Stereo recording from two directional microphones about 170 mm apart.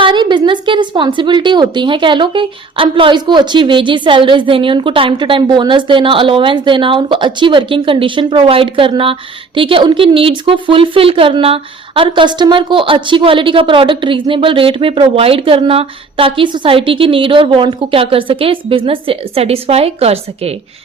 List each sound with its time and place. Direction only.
0.0 s speech: 25° right (ahead or behind)